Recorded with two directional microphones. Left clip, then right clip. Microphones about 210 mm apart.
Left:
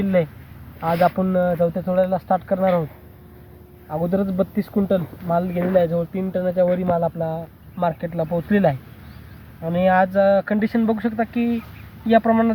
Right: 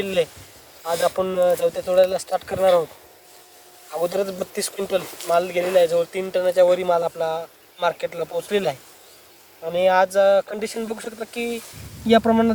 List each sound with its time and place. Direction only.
0.0 s speech: 45° right (ahead or behind)
0.9 s speech: 10° right (ahead or behind)
1.2 s speech: 35° right (ahead or behind)
2.6 s speech: 15° right (ahead or behind)
3.9 s speech: 30° right (ahead or behind)